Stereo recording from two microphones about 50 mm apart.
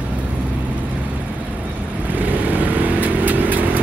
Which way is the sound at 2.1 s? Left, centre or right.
Right.